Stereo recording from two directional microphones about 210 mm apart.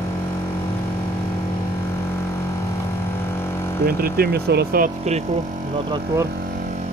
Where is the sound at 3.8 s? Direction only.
45° right (ahead or behind).